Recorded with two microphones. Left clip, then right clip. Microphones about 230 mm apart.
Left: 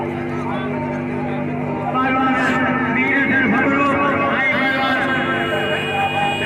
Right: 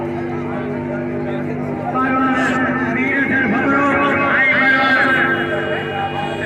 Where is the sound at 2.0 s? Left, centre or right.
Left.